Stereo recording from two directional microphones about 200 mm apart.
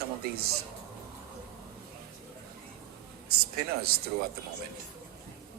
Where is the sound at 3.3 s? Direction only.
50° right (ahead or behind).